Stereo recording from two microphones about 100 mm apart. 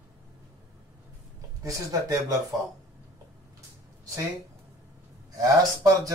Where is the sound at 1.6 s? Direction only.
35° right (ahead or behind).